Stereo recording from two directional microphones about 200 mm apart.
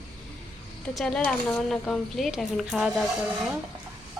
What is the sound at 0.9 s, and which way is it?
A woman's voice, 5° left (ahead or behind).